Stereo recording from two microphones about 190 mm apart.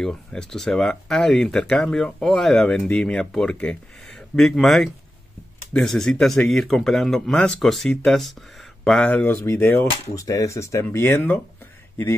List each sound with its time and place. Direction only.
0.0 s speech: 5° left (ahead or behind)